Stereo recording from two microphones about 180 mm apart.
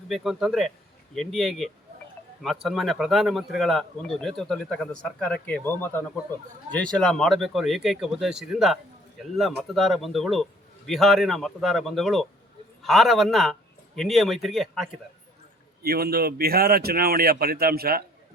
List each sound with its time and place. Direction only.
0.1 s speech: centre (ahead or behind)
15.8 s speech: 60° right (ahead or behind)